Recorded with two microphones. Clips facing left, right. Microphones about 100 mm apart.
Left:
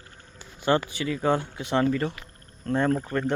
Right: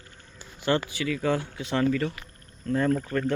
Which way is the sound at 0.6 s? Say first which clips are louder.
Left 2 dB; 20° left (ahead or behind).